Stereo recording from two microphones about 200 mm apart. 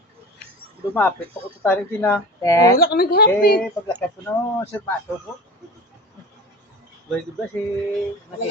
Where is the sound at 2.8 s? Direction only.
50° left (ahead or behind).